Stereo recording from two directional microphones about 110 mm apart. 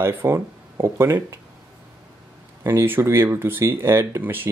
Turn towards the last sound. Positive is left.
turn(degrees=-20)  # may be behind; listen again after turning